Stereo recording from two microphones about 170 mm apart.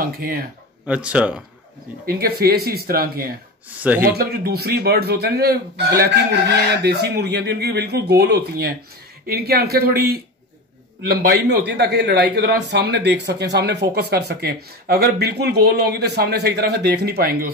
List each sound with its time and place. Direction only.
0.0 s speech: 60° right (ahead or behind)
0.8 s speech: 5° right (ahead or behind)
2.0 s speech: 65° right (ahead or behind)
3.7 s speech: 10° right (ahead or behind)
4.0 s speech: 65° right (ahead or behind)